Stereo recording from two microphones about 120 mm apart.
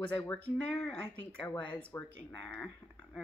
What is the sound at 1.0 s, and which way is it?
Speech, 15° left (ahead or behind).